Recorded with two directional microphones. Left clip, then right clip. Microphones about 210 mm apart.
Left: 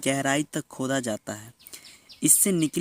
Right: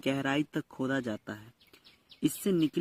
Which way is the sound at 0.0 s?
25° left (ahead or behind).